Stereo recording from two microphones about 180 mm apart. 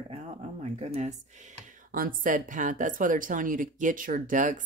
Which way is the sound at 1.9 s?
50° right (ahead or behind).